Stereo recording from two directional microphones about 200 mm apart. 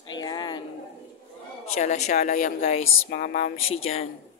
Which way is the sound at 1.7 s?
35° left (ahead or behind).